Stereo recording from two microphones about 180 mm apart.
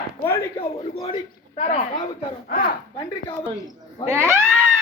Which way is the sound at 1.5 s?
40° left (ahead or behind).